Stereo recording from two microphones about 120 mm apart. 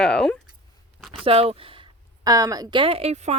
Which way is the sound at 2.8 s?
50° right (ahead or behind).